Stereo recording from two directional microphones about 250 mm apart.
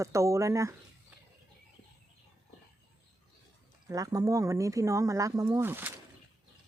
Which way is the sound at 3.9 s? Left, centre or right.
Centre.